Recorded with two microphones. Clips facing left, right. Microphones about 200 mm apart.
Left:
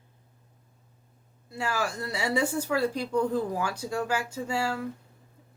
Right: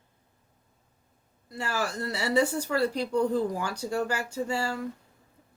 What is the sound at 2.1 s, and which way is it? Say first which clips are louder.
Speech: right 3 dB; 10° left (ahead or behind).